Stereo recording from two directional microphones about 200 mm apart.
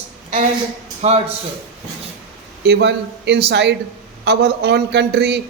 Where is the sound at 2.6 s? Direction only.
55° right (ahead or behind).